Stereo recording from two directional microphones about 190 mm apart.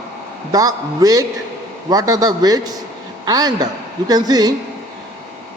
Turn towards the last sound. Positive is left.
turn(degrees=-20)  # may be behind; listen again after turning